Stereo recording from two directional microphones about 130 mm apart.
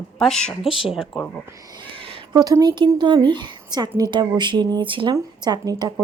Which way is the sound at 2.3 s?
30° right (ahead or behind).